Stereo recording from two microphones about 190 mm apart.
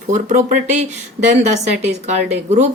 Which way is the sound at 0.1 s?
40° right (ahead or behind).